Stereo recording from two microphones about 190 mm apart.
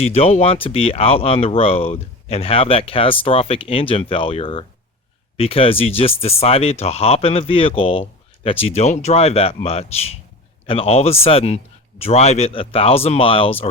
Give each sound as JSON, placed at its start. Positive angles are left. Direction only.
{"t": 0.0, "sound": "speech", "side_deg": 35}